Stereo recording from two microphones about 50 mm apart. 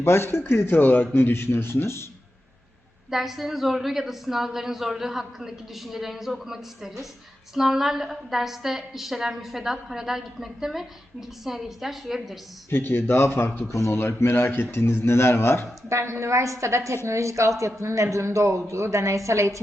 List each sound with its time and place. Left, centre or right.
0.0 s speech: left
0.8 s speech: left
3.1 s a woman's voice: centre
12.7 s speech: left
14.0 s speech: left
15.9 s a woman's voice: right